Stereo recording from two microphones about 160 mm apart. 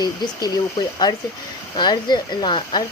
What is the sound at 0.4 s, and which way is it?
Speech, 25° left (ahead or behind).